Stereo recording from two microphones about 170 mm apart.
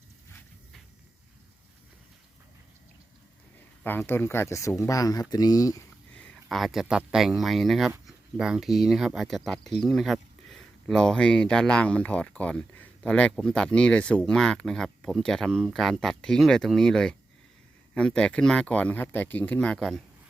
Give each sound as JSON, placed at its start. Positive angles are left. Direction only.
{"t": 3.8, "sound": "speech", "side_deg": 10}
{"t": 6.1, "sound": "speech", "side_deg": 5}